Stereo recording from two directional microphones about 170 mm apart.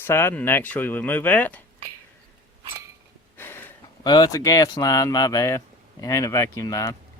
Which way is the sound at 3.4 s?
15° left (ahead or behind).